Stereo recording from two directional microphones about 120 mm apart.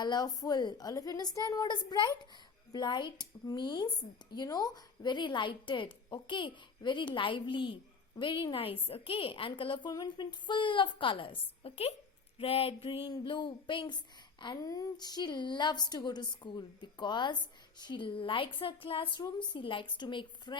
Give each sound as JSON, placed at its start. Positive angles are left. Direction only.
{"t": 0.0, "sound": "speech", "side_deg": 35}
{"t": 12.4, "sound": "a sound", "side_deg": 55}
{"t": 13.1, "sound": "speech", "side_deg": 40}